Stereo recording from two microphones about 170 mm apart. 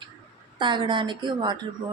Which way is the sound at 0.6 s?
30° right (ahead or behind).